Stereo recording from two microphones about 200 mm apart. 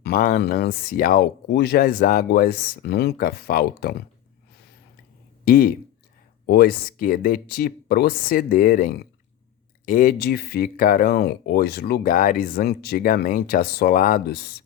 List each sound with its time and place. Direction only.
0.0 s speech: 45° left (ahead or behind)
5.5 s speech: 45° left (ahead or behind)